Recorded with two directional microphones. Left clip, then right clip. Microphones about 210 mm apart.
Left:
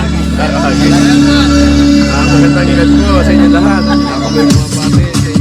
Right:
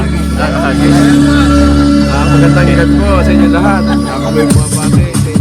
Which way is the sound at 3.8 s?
45° left (ahead or behind).